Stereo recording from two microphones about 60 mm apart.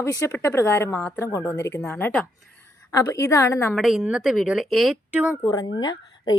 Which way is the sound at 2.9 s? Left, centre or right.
Left.